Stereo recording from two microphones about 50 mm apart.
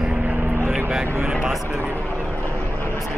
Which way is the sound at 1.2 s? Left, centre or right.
Right.